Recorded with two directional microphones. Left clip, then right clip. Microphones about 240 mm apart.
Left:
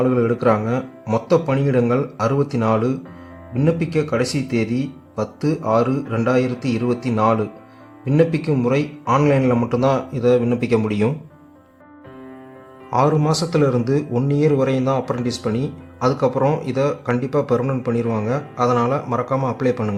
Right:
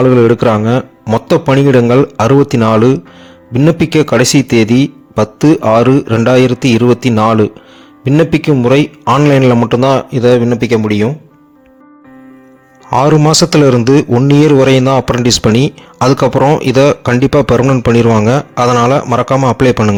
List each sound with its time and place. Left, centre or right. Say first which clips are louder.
0.0 s a man's voice: right 10 dB; right
12.9 s a man's voice: right 9 dB; right